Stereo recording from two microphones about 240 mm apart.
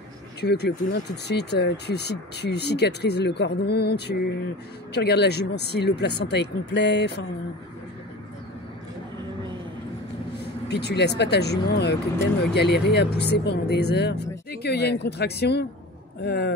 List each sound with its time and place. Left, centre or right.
0.4 s speech: left
10.7 s speech: left